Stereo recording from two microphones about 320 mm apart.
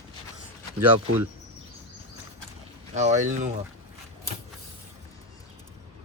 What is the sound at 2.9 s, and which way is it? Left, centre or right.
Speech, right.